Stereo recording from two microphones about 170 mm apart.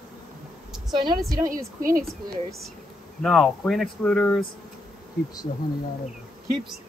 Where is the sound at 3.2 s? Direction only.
5° left (ahead or behind).